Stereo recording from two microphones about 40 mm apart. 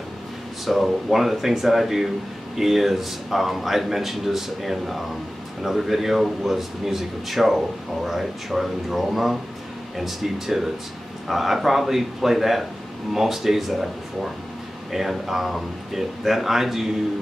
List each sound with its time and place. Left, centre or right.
0.7 s a man's voice: centre